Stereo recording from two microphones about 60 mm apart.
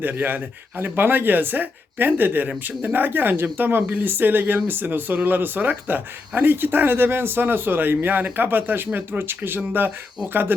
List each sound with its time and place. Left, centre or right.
0.0 s speech: right